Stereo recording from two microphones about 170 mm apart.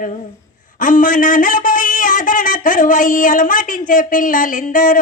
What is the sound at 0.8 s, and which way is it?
A man's voice, 50° left (ahead or behind).